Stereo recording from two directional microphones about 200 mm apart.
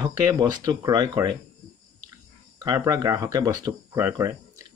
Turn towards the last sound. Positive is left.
turn(degrees=-15)  # may be behind; listen again after turning